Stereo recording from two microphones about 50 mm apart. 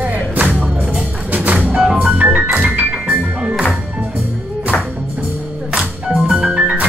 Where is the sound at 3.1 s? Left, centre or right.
Centre.